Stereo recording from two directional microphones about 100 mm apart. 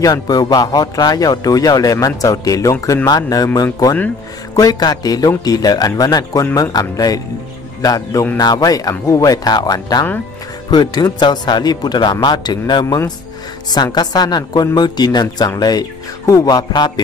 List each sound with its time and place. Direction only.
0.0 s speech: 40° left (ahead or behind)